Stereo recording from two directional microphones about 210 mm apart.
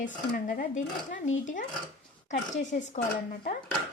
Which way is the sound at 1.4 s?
35° left (ahead or behind).